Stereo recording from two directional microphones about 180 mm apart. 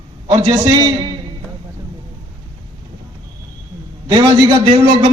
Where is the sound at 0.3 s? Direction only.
20° right (ahead or behind).